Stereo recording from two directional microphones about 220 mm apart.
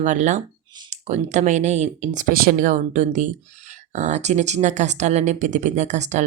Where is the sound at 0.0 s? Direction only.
35° right (ahead or behind).